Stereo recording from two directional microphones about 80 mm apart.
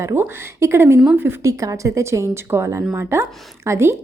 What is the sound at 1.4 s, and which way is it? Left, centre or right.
A woman's voice, right.